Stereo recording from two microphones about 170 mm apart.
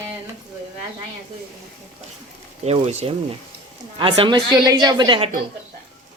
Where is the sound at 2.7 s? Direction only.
40° right (ahead or behind).